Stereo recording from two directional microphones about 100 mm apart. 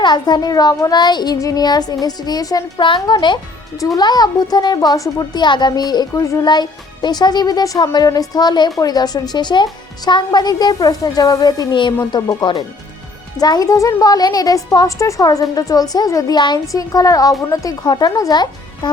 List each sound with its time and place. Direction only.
0.0 s a child's voice: 45° left (ahead or behind)
2.8 s a child's voice: 55° left (ahead or behind)